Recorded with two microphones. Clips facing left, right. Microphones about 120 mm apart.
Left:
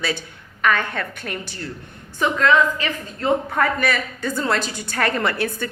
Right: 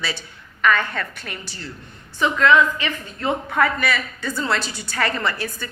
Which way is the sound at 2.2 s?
40° left (ahead or behind).